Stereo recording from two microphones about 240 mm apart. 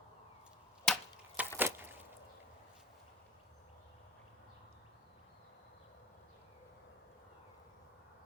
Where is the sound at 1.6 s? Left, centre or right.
Centre.